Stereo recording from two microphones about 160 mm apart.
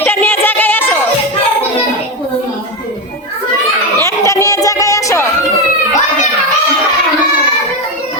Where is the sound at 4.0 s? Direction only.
20° left (ahead or behind).